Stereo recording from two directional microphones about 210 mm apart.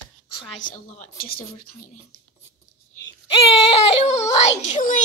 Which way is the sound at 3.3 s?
30° left (ahead or behind).